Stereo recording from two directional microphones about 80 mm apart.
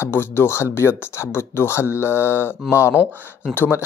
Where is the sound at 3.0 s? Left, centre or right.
Left.